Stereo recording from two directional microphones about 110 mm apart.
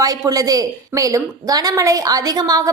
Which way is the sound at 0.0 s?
35° right (ahead or behind).